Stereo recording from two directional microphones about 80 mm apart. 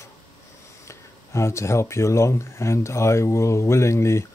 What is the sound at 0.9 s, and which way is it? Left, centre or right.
Speech, left.